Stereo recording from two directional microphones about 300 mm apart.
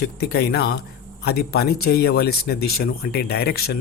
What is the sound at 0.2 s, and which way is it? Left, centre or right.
Speech, left.